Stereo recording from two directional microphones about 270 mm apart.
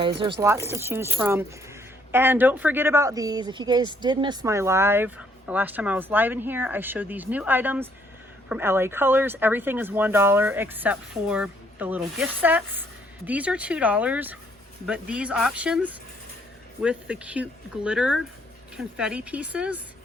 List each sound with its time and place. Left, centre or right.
0.2 s speech: centre